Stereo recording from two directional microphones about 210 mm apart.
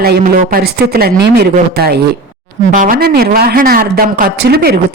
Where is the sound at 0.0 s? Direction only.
45° right (ahead or behind).